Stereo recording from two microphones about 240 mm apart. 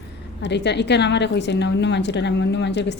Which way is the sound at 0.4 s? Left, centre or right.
Left.